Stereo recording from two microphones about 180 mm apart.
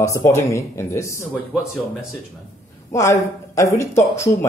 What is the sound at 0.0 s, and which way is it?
Speech, 15° left (ahead or behind).